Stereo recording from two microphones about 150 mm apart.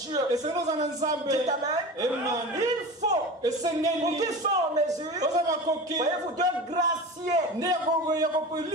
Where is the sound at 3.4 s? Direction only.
25° right (ahead or behind).